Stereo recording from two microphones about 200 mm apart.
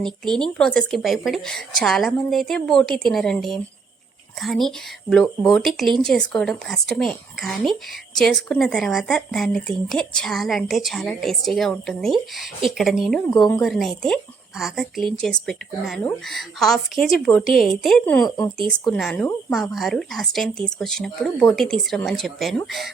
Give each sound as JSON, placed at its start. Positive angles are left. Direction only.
{"t": 0.0, "sound": "speech", "side_deg": 5}
{"t": 18.3, "sound": "speech", "side_deg": 20}
{"t": 18.7, "sound": "speech", "side_deg": 0}